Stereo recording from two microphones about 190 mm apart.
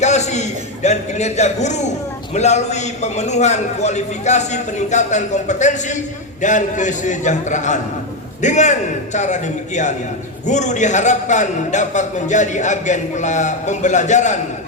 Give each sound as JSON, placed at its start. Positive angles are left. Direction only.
{"t": 0.0, "sound": "a man's voice", "side_deg": 35}